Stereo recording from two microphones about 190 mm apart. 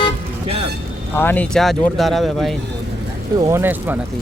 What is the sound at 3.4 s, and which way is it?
Speech, 15° right (ahead or behind).